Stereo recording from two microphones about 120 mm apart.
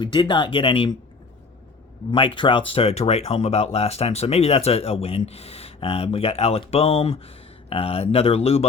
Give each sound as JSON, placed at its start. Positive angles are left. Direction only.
{"t": 0.0, "sound": "speech", "side_deg": 40}
{"t": 2.0, "sound": "speech", "side_deg": 45}